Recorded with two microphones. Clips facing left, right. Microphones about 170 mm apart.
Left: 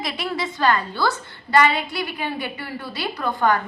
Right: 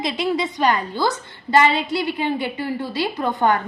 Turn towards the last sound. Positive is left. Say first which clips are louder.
# right 2 dB
turn(degrees=-20)  # may be behind; listen again after turning